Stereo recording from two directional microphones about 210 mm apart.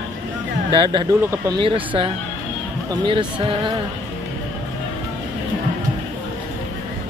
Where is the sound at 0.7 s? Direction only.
25° right (ahead or behind).